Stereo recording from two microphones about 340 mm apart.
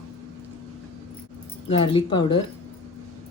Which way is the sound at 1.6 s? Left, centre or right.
Centre.